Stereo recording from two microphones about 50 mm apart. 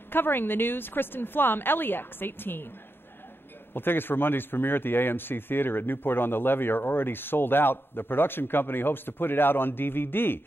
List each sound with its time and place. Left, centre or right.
0.1 s a man's voice: left
3.7 s a man's voice: left